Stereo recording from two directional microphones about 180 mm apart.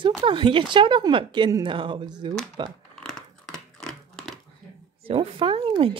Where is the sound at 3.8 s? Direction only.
Centre (ahead or behind).